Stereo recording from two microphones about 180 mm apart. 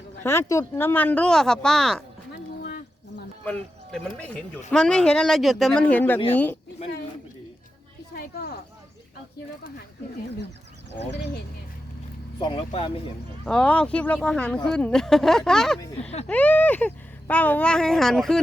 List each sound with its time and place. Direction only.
0.2 s speech: 15° left (ahead or behind)
2.6 s a sound: 60° left (ahead or behind)
3.4 s speech: 5° left (ahead or behind)
8.1 s a sound: 55° left (ahead or behind)
12.4 s speech: 30° left (ahead or behind)
13.4 s speech: 5° left (ahead or behind)